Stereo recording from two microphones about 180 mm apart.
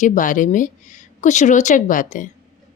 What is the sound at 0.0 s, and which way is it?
A woman's voice, 45° left (ahead or behind).